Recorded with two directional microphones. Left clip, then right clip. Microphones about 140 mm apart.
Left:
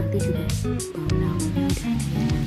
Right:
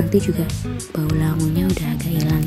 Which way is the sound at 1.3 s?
Centre (ahead or behind).